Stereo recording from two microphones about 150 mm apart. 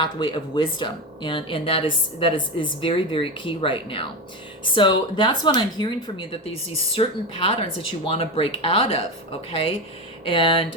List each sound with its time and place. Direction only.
0.0 s speech: 35° left (ahead or behind)
10.2 s speech: 35° left (ahead or behind)